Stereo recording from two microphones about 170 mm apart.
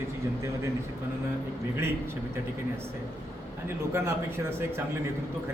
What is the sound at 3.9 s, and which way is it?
Speech, 15° right (ahead or behind).